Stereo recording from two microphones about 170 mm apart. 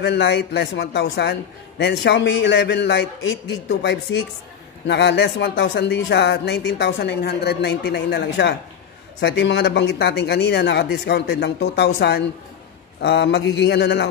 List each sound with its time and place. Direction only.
0.0 s a man's voice: 80° left